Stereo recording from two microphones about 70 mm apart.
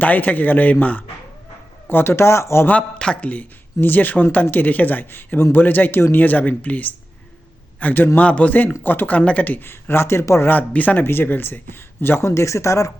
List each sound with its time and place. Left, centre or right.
0.0 s a man's voice: left
2.6 s a man's voice: centre; by 10.5 s left
10.5 s speech: left